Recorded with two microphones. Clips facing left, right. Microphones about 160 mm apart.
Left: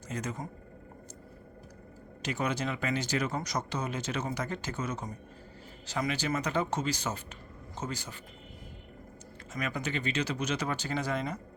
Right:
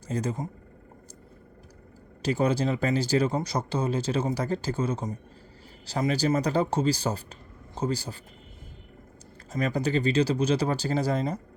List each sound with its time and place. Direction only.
0.1 s speech: 30° right (ahead or behind)
2.2 s speech: 30° right (ahead or behind)
9.5 s speech: 35° right (ahead or behind)